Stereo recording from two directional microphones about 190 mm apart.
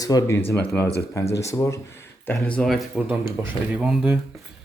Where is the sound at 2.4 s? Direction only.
5° left (ahead or behind).